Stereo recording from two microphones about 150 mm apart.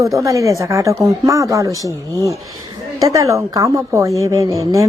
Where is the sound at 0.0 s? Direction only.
20° right (ahead or behind).